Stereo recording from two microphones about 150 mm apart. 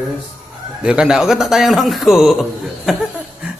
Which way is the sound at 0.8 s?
5° right (ahead or behind).